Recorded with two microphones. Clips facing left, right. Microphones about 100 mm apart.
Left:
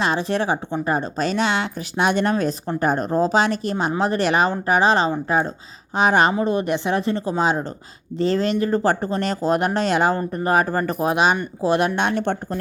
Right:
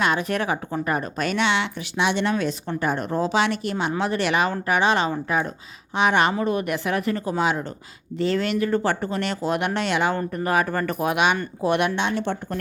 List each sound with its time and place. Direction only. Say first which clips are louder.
0.0 s speech: left 2 dB; 30° left (ahead or behind)
11.9 s speech: left 3 dB; 55° left (ahead or behind)